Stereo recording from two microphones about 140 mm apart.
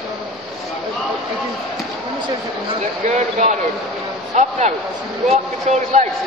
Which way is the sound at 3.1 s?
55° right (ahead or behind).